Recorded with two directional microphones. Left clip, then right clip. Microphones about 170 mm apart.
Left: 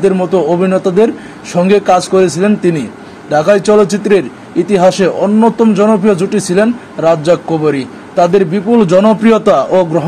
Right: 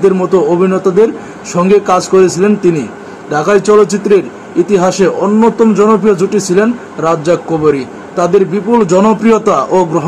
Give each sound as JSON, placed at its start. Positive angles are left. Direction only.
{"t": 0.0, "sound": "speech", "side_deg": 25}